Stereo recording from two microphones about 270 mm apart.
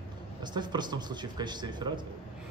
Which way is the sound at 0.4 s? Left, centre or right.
Centre.